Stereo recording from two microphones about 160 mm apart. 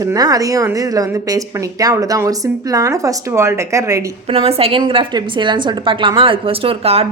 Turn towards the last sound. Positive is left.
turn(degrees=-40)  # may be behind; listen again after turning